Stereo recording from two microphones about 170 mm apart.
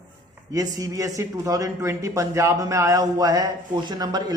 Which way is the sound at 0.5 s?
20° right (ahead or behind).